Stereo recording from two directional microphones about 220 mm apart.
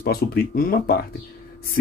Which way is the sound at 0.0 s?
45° left (ahead or behind).